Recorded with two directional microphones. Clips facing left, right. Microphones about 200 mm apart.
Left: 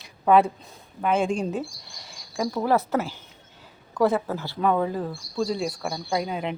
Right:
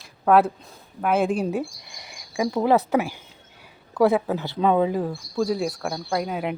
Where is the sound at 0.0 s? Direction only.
5° right (ahead or behind).